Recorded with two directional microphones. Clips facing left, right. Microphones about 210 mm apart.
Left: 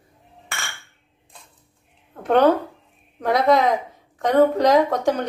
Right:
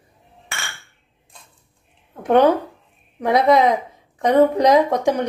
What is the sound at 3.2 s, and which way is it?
A woman's voice, 15° right (ahead or behind).